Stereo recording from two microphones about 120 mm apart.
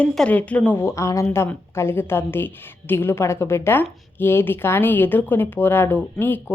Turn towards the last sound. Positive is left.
turn(degrees=15)  # may be behind; listen again after turning